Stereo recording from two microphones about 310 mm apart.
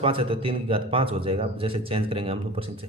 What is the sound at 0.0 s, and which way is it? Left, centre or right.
A man's voice, centre.